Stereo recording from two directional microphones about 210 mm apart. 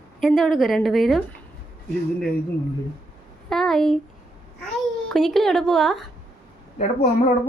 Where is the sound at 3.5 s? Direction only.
Centre (ahead or behind).